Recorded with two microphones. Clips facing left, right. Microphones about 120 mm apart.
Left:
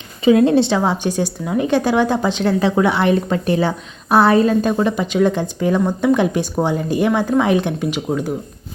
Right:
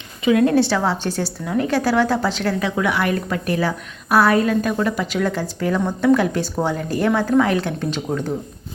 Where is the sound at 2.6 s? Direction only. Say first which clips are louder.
Left 6 dB; 30° left (ahead or behind); by 8.3 s 10° left (ahead or behind).